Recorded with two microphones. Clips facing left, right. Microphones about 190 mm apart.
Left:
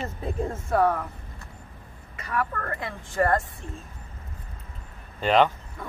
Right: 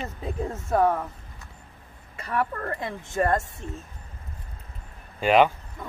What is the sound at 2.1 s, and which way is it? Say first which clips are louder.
Speech: right 1 dB; 30° right (ahead or behind).